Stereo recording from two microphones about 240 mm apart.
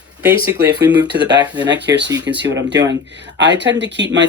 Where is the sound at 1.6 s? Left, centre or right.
Right.